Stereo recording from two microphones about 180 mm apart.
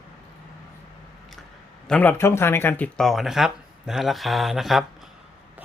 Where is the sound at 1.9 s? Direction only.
10° left (ahead or behind).